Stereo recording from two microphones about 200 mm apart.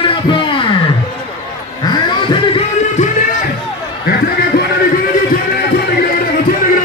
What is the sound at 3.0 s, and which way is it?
Music, 40° left (ahead or behind).